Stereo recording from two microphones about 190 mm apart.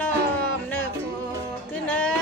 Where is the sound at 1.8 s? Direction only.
10° left (ahead or behind).